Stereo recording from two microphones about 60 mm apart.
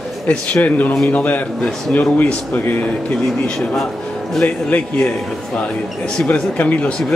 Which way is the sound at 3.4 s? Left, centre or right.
Centre.